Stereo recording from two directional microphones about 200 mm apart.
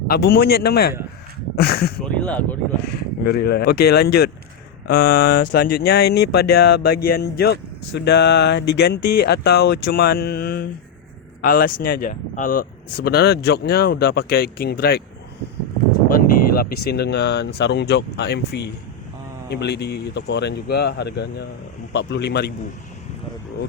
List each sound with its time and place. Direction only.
0.1 s speech: 50° left (ahead or behind)
2.1 s speech: 5° left (ahead or behind)
3.2 s speech: 50° left (ahead or behind)
16.0 s speech: 45° left (ahead or behind)